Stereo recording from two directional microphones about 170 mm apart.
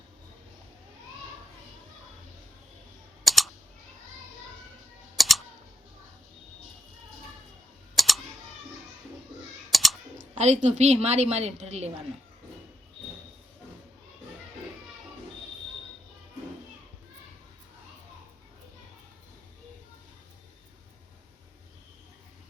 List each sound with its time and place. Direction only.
3.2 s typing: centre (ahead or behind)
5.1 s typing: centre (ahead or behind)
7.9 s typing: centre (ahead or behind)
9.7 s typing: centre (ahead or behind)
10.4 s a woman's voice: 40° right (ahead or behind)